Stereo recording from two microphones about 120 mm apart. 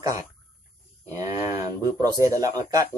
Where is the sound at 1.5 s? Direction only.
30° right (ahead or behind).